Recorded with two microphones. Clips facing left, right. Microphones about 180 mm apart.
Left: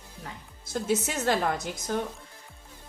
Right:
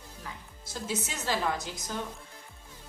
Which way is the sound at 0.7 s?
55° left (ahead or behind).